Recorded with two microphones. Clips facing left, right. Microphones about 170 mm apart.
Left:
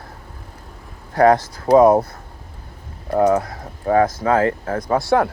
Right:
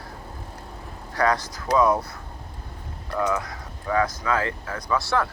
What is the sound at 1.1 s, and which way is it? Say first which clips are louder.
Speech: left 9 dB; 50° left (ahead or behind).